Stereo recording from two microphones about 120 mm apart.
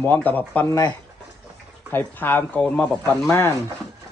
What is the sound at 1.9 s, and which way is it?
Speech, 15° left (ahead or behind).